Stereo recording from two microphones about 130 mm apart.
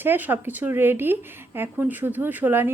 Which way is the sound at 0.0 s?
15° right (ahead or behind).